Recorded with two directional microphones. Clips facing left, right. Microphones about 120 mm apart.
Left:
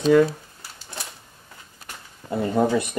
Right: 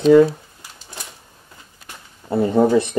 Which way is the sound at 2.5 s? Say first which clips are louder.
Right 5 dB; 25° right (ahead or behind).